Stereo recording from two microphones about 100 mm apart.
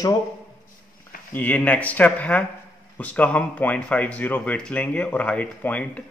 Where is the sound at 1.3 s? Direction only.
15° left (ahead or behind).